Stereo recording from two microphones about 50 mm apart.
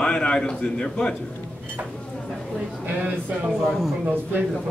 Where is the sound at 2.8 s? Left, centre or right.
Right.